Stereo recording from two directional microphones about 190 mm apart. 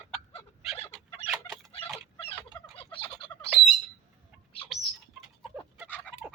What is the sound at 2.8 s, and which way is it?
Turkey, 30° left (ahead or behind).